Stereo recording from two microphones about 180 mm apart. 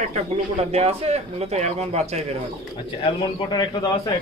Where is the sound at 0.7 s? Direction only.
35° right (ahead or behind).